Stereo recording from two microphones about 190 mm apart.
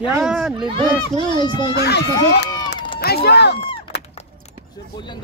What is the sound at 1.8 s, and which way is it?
Speech, 60° left (ahead or behind).